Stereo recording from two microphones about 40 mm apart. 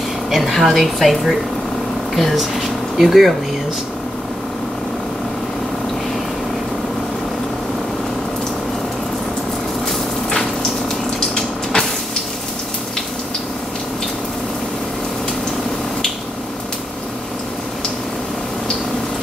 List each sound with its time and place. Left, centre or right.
0.3 s speech: centre
11.1 s water: centre